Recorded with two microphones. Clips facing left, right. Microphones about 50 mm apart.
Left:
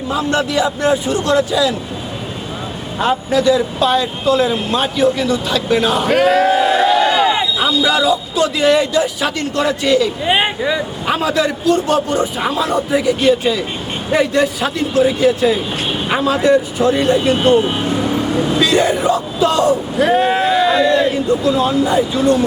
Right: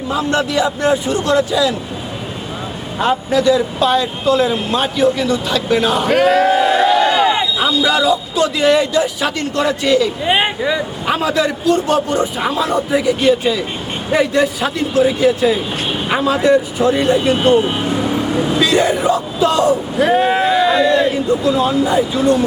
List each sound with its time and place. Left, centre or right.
0.1 s a man's voice: centre
3.0 s a man's voice: centre
5.2 s speech: centre
5.6 s a man's voice: centre
6.1 s a sound: centre
6.4 s a sound: centre
7.7 s a man's voice: centre